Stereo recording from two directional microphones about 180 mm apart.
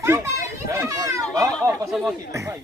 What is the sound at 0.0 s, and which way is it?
Children playing, 15° right (ahead or behind).